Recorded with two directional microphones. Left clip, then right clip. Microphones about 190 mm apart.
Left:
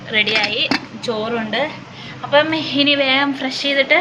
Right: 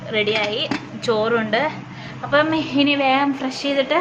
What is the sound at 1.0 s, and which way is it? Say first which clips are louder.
Speech: right 2 dB; 45° right (ahead or behind).